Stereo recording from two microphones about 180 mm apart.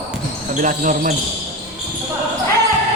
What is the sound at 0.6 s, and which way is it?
Speech, 45° right (ahead or behind).